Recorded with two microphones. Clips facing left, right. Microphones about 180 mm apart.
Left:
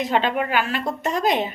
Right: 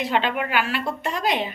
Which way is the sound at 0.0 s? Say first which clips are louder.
Left 2 dB; 40° left (ahead or behind).